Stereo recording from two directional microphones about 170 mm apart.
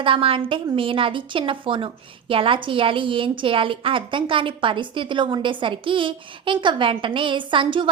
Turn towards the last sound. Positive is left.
turn(degrees=-30)  # may be behind; listen again after turning